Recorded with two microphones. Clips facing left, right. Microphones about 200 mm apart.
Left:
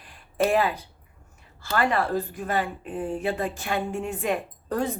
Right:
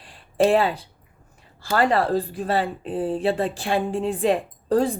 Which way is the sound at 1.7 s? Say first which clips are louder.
Right 4 dB; 35° right (ahead or behind).